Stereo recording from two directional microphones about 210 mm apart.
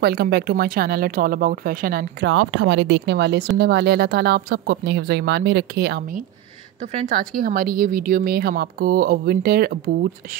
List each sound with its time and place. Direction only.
0.0 s a woman's voice: 45° right (ahead or behind)
2.2 s a woman's voice: 70° right (ahead or behind); by 9.8 s 45° right (ahead or behind)